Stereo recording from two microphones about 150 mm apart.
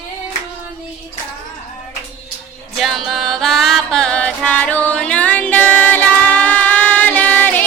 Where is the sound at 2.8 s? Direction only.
Centre (ahead or behind).